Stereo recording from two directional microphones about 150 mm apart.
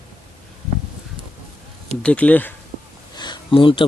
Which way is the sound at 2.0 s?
10° left (ahead or behind).